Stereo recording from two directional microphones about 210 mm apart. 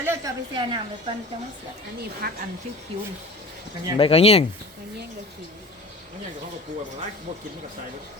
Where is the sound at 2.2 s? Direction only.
45° right (ahead or behind).